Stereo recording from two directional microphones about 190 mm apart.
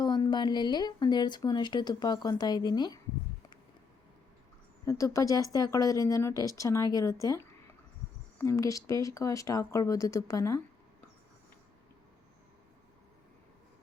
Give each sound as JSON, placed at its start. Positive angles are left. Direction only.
{"t": 0.0, "sound": "speech", "side_deg": 20}
{"t": 4.9, "sound": "speech", "side_deg": 15}